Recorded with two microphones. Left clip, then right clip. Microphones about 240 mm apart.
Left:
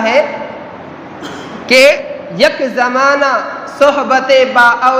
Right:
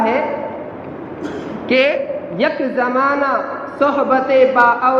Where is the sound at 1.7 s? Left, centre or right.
Left.